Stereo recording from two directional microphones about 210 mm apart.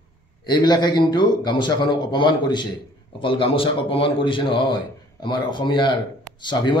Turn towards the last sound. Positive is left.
turn(degrees=20)  # may be behind; listen again after turning